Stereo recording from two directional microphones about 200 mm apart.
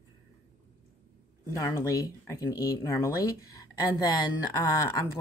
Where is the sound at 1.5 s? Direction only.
15° left (ahead or behind).